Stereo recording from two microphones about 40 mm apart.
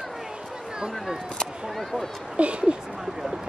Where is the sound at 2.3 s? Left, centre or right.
Right.